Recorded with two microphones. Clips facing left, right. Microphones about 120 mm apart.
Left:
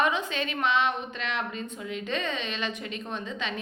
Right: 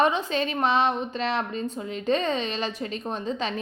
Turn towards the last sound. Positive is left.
turn(degrees=-35)  # may be behind; listen again after turning